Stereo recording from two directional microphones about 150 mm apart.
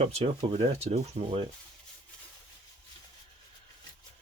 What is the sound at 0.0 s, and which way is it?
Speech, 40° right (ahead or behind).